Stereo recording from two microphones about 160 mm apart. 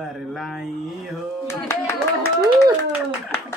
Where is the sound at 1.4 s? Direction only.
15° left (ahead or behind).